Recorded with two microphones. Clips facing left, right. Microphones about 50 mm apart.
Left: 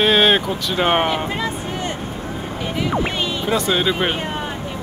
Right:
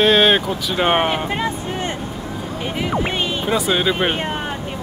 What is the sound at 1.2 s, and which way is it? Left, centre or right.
Speech, right.